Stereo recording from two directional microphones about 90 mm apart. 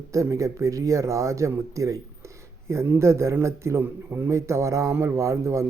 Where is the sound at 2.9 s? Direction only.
30° right (ahead or behind).